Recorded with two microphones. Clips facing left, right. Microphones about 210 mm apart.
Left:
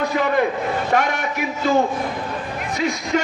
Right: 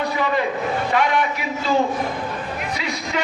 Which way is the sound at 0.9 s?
45° left (ahead or behind).